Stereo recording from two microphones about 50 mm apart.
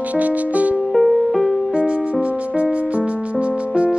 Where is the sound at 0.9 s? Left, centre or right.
Centre.